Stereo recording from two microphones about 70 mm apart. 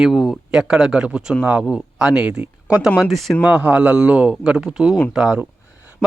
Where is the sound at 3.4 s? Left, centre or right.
Centre.